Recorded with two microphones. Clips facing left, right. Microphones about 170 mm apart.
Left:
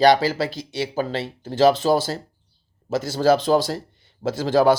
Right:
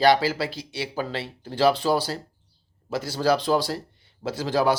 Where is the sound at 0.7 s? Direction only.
25° left (ahead or behind).